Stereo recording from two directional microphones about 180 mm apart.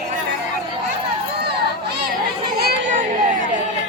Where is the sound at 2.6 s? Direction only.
60° right (ahead or behind).